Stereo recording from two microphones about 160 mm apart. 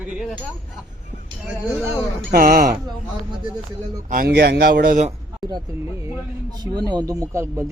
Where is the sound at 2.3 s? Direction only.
65° right (ahead or behind).